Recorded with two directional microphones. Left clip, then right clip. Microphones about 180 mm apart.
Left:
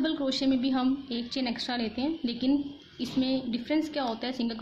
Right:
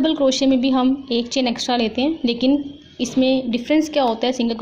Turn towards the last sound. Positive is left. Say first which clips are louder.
# right 12 dB
turn(degrees=-25)  # may be behind; listen again after turning